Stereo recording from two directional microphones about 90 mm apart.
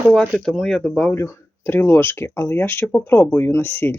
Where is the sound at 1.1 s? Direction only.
30° left (ahead or behind).